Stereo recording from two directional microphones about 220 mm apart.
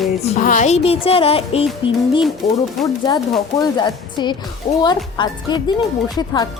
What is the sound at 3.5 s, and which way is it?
Speech, 20° left (ahead or behind).